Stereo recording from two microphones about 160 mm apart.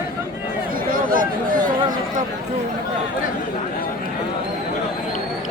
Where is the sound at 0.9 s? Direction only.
60° right (ahead or behind).